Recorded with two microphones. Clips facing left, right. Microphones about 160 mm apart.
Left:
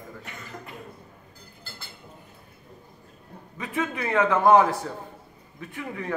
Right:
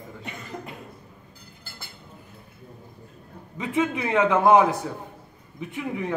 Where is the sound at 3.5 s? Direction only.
20° right (ahead or behind).